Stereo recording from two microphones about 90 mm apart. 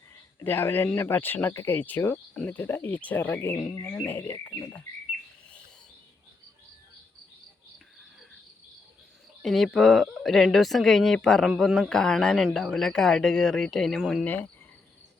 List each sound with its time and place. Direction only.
0.3 s speech: 25° left (ahead or behind)
9.4 s speech: centre (ahead or behind)